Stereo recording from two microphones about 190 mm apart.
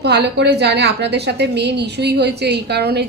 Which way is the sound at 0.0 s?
60° right (ahead or behind).